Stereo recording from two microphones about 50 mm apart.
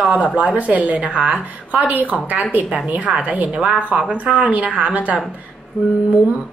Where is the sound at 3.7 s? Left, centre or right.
Right.